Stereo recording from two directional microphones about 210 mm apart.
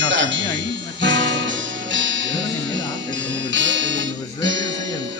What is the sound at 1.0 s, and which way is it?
Music, 60° right (ahead or behind).